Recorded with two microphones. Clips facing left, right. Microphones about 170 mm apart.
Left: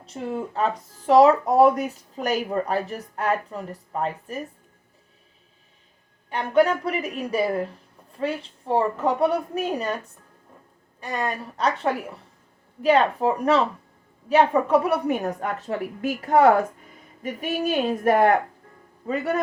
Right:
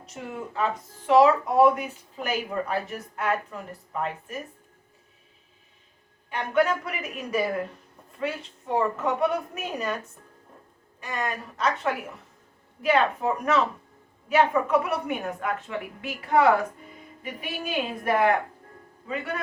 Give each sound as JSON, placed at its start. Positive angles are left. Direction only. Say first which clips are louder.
{"t": 0.0, "sound": "speech", "louder": "left 6 dB", "side_deg": 30}
{"t": 6.3, "sound": "speech", "louder": "left 4 dB", "side_deg": 35}
{"t": 11.0, "sound": "a woman's voice", "louder": "left 3 dB", "side_deg": 35}